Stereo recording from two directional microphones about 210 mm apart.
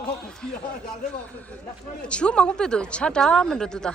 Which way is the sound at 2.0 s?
5° left (ahead or behind).